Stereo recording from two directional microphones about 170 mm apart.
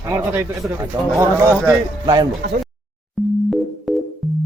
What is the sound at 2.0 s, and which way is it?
Speech, 25° right (ahead or behind).